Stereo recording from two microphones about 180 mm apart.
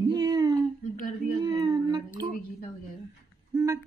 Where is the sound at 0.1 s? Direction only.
20° right (ahead or behind).